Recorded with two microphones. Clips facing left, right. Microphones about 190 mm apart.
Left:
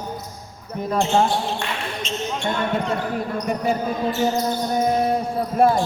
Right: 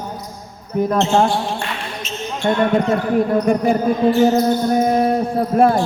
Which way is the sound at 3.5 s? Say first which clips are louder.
Right 7 dB; 55° right (ahead or behind).